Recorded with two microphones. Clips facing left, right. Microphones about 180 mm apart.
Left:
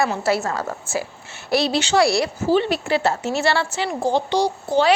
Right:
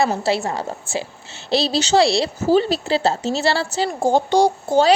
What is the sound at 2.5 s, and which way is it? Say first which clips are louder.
Speech: right 2 dB; 35° right (ahead or behind).